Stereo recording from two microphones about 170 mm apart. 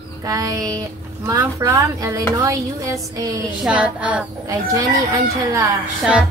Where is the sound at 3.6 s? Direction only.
5° right (ahead or behind).